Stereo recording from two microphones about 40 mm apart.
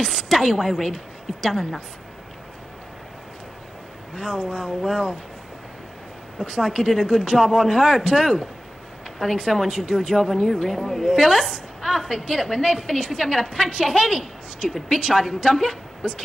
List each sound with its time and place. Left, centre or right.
0.3 s a woman's voice: centre
4.2 s a woman's voice: centre
6.6 s a woman's voice: centre
11.8 s a sound: centre
12.2 s a woman's voice: centre
15.2 s speech: centre